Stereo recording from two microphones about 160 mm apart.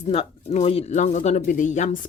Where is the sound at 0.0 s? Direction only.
40° left (ahead or behind).